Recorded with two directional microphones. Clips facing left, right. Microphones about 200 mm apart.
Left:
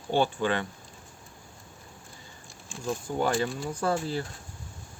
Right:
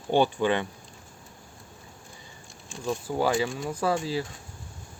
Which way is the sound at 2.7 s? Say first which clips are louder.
Right 2 dB; 5° right (ahead or behind).